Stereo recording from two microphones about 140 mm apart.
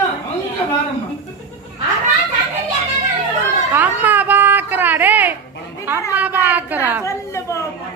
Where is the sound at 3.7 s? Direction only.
10° right (ahead or behind).